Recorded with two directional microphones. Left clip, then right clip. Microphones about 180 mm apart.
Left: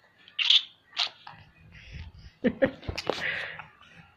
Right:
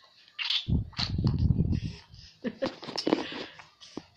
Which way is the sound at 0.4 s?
5° right (ahead or behind).